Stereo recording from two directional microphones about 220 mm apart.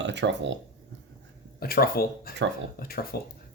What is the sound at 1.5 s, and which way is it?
Speech, 45° left (ahead or behind).